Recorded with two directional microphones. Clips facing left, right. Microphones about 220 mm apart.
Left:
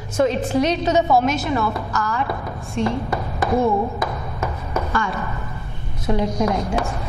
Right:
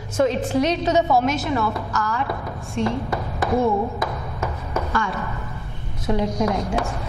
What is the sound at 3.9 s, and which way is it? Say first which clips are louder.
Chopping: left 1 dB; 20° left (ahead or behind).